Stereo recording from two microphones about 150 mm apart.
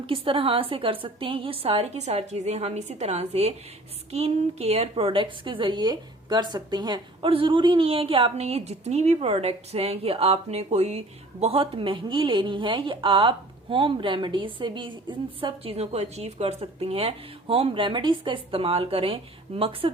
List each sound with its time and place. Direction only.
0.0 s a woman's voice: 35° right (ahead or behind)